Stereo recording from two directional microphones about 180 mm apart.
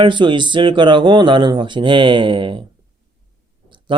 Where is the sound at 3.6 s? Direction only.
25° right (ahead or behind).